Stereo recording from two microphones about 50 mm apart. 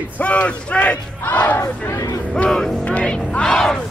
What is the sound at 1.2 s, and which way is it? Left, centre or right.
Battle cry, left.